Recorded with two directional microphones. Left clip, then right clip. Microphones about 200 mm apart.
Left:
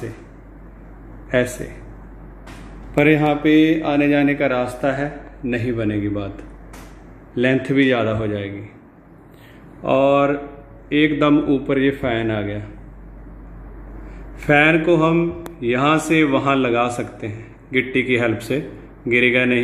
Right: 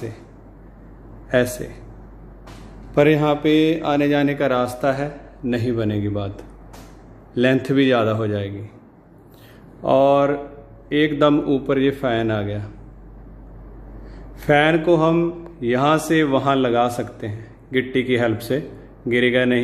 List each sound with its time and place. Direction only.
2.9 s a man's voice: 15° right (ahead or behind)
7.3 s a man's voice: 15° right (ahead or behind)
9.8 s a man's voice: 15° right (ahead or behind)
14.4 s a man's voice: 10° right (ahead or behind)